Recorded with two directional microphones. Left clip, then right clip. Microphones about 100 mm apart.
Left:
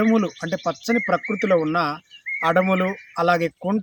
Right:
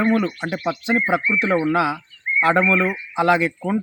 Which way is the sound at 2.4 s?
40° left (ahead or behind).